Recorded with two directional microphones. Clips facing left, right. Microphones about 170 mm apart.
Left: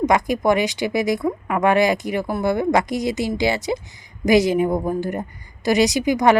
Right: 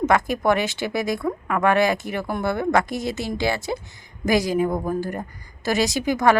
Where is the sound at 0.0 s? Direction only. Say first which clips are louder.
Left 2 dB; 15° left (ahead or behind).